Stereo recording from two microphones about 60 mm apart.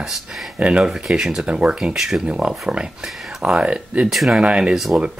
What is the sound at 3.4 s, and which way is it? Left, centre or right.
Speech, centre.